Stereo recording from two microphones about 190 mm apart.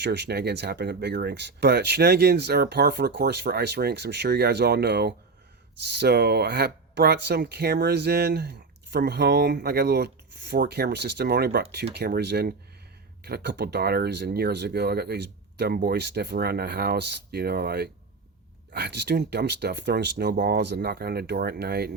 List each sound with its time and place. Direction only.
0.0 s speech: 60° right (ahead or behind)